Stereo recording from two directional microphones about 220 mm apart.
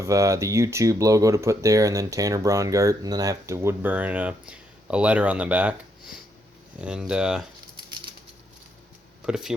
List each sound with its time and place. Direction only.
0.0 s speech: 15° right (ahead or behind)
6.8 s speech: 5° right (ahead or behind)
9.2 s speech: centre (ahead or behind)